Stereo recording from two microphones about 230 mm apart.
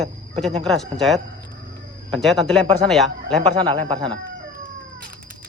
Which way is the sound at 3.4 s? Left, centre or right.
Right.